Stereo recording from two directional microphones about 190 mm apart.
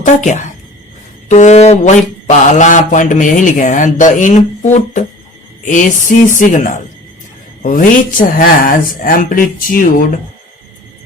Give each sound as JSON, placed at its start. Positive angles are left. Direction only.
{"t": 0.0, "sound": "mantra", "side_deg": 40}
{"t": 5.6, "sound": "speech", "side_deg": 40}